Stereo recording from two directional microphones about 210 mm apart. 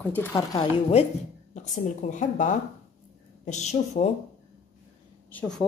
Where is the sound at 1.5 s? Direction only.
35° left (ahead or behind).